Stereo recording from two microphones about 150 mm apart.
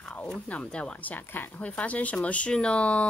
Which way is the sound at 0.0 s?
5° left (ahead or behind).